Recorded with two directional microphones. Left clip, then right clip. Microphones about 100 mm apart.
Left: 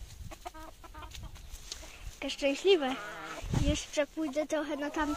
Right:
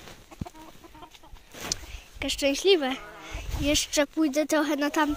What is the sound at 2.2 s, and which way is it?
Speech, 55° right (ahead or behind).